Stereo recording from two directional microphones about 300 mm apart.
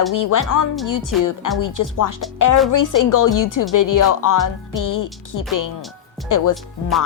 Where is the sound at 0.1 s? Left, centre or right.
Left.